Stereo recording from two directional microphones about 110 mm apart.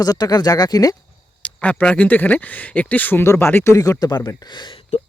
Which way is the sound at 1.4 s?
10° left (ahead or behind).